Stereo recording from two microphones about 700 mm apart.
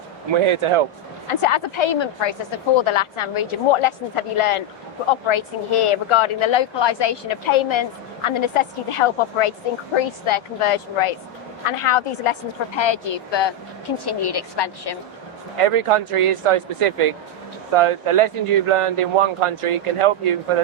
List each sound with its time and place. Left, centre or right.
0.3 s speech: right
1.3 s a woman's voice: left
15.5 s speech: right